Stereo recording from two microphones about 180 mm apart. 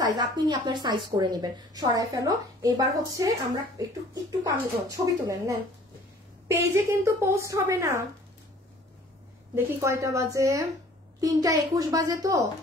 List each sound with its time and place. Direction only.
0.2 s a woman's voice: 25° right (ahead or behind)
9.8 s a woman's voice: 15° right (ahead or behind)